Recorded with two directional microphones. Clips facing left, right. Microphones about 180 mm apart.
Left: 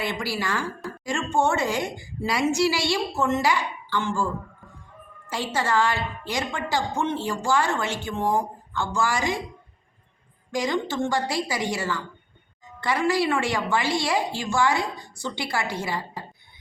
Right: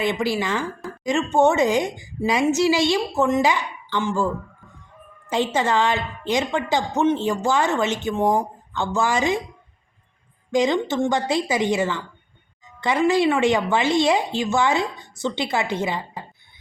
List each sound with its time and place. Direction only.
0.0 s a woman's voice: 20° right (ahead or behind)
5.3 s a woman's voice: 20° right (ahead or behind)
10.5 s a woman's voice: 20° right (ahead or behind)